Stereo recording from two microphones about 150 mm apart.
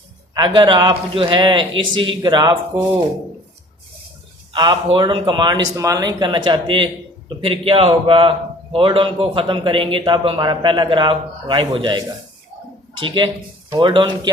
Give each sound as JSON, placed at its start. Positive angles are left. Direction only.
{"t": 0.3, "sound": "a man's voice", "side_deg": -30}
{"t": 4.5, "sound": "a man's voice", "side_deg": -30}